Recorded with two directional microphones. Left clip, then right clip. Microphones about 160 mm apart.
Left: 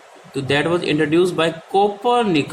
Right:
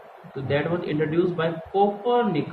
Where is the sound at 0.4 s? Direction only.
80° left.